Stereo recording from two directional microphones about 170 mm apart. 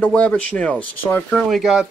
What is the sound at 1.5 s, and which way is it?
Speech, centre (ahead or behind).